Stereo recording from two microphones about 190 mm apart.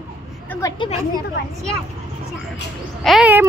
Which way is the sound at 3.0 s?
5° right (ahead or behind).